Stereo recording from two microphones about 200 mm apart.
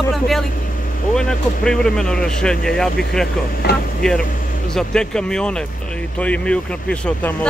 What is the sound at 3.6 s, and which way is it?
Speech, 55° left (ahead or behind).